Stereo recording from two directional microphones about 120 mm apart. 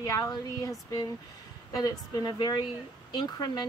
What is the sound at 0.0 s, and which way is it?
A woman's voice, 30° left (ahead or behind).